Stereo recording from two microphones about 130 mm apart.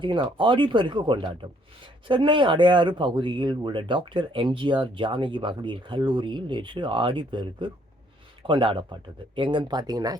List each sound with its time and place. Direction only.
0.0 s speech: 40° right (ahead or behind)